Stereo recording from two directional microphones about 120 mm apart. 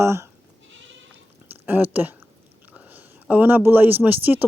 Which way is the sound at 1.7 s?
15° right (ahead or behind).